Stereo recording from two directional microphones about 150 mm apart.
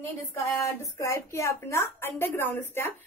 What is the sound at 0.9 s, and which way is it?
A woman's voice, 20° left (ahead or behind).